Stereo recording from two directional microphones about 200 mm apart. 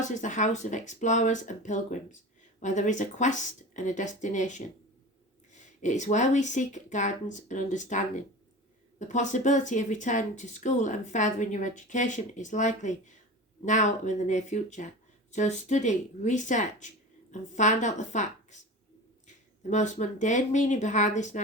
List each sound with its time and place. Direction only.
0.0 s speech: 40° left (ahead or behind)
19.7 s speech: 35° left (ahead or behind)